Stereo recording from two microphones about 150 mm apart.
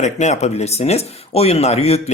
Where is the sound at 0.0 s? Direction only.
50° left (ahead or behind).